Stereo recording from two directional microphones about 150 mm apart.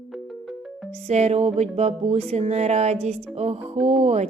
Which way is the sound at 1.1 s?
45° right (ahead or behind).